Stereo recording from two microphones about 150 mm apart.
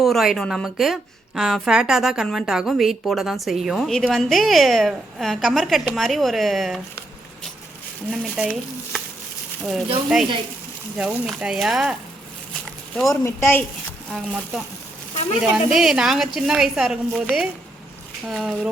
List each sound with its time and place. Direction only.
0.0 s a woman's voice: centre (ahead or behind)
8.1 s a woman's voice: 5° right (ahead or behind)
10.1 s a woman's voice: 5° right (ahead or behind)
13.2 s speech: 15° left (ahead or behind)
14.1 s a woman's voice: 5° right (ahead or behind)
15.1 s a sound: 50° left (ahead or behind)
15.4 s a woman's voice: centre (ahead or behind)
18.3 s a woman's voice: 5° right (ahead or behind)